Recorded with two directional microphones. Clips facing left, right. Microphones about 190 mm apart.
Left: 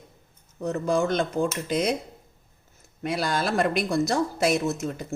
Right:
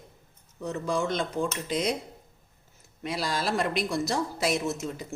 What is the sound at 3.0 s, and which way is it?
Speech, 55° left (ahead or behind).